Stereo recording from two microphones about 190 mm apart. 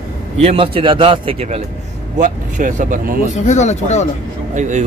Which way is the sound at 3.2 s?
40° left (ahead or behind).